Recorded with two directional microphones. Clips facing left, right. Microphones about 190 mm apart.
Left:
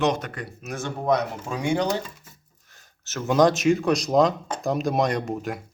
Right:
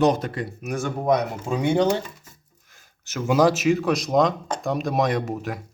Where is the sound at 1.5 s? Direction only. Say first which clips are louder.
Right 5 dB; 20° right (ahead or behind).